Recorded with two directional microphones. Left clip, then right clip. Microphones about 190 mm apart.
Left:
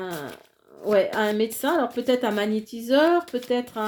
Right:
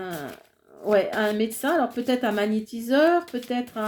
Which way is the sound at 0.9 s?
35° left (ahead or behind).